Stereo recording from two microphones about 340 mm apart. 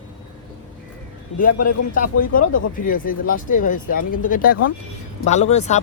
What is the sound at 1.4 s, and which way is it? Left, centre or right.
Speech, left.